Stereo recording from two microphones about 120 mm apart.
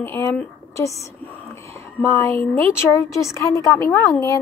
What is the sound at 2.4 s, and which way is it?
Speech, 55° right (ahead or behind).